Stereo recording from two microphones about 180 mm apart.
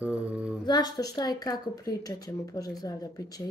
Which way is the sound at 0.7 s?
20° left (ahead or behind).